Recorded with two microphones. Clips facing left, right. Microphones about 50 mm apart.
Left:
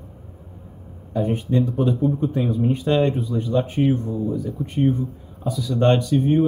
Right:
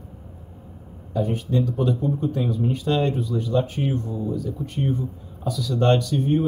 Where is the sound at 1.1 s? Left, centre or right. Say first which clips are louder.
Left 2 dB; left.